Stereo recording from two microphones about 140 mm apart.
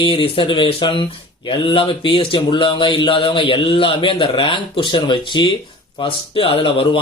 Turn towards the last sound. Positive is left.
turn(degrees=40)  # may be behind; listen again after turning